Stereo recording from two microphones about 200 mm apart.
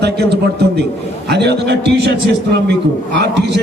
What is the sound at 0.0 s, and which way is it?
A man's voice, 55° right (ahead or behind).